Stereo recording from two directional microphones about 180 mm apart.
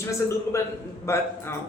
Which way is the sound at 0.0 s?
15° left (ahead or behind).